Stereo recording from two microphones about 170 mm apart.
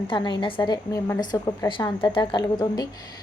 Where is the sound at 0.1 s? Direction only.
25° left (ahead or behind).